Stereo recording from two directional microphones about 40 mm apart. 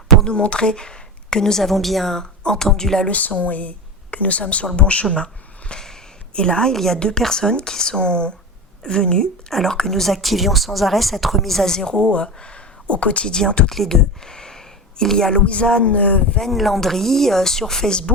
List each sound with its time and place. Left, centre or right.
0.3 s a woman's voice: left
1.6 s a woman's voice: centre
2.4 s speech: centre
3.1 s speech: left
5.1 s a sound: left
6.7 s speech: centre
9.5 s a woman's voice: centre; by 13.3 s left
13.3 s speech: centre
15.4 s speech: left
16.4 s speech: centre